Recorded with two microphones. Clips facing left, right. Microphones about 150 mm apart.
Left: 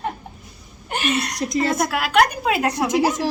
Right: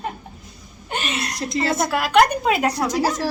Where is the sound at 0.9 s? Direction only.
Centre (ahead or behind).